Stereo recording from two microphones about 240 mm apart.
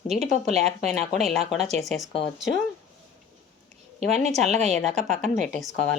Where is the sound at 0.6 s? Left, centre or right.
Centre.